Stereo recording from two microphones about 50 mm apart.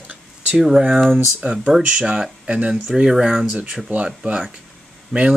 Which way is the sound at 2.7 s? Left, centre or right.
Centre.